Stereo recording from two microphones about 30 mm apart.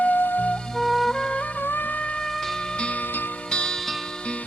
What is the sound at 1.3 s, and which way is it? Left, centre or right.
Music, left.